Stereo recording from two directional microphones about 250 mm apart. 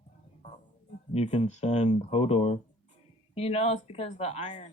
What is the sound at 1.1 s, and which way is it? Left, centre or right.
Speech, left.